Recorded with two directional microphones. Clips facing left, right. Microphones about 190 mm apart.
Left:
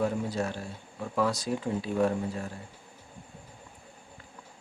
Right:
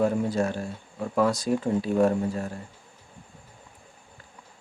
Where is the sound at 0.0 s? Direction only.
50° right (ahead or behind).